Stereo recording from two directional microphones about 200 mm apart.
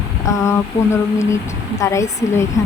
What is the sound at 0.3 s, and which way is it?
Speech, 15° left (ahead or behind).